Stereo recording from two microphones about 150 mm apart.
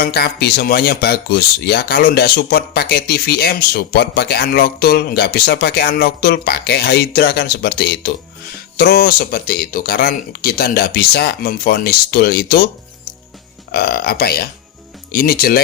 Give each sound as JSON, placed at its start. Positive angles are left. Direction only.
{"t": 0.0, "sound": "speech", "side_deg": 90}
{"t": 13.7, "sound": "speech", "side_deg": 90}